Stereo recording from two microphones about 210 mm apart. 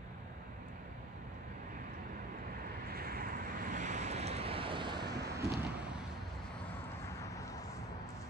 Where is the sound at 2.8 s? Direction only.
45° right (ahead or behind); by 5.1 s 20° right (ahead or behind).